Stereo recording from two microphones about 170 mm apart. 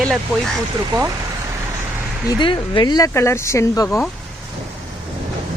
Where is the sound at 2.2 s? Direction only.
30° left (ahead or behind).